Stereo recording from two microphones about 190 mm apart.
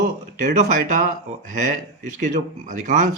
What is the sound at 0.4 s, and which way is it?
Speech, 40° right (ahead or behind).